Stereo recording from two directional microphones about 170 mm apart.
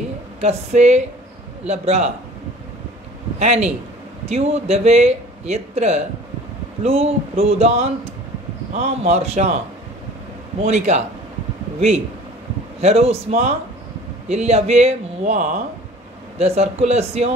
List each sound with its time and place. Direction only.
0.4 s speech: 40° right (ahead or behind)
3.3 s speech: 40° right (ahead or behind)
10.6 s speech: 40° right (ahead or behind)
12.8 s speech: 35° right (ahead or behind)